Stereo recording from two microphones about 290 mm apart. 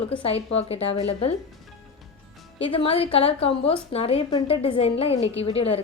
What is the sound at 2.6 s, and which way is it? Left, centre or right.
A woman's voice, centre.